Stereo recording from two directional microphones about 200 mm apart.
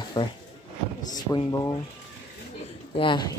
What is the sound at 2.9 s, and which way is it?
Speech, 25° left (ahead or behind).